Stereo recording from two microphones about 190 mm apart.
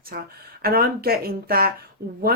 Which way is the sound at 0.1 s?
55° right (ahead or behind).